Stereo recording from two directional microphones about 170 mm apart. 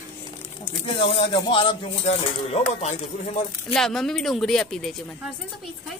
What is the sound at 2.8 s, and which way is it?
Speech, 40° left (ahead or behind).